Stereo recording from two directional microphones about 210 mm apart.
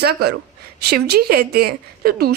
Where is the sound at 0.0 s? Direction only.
50° right (ahead or behind).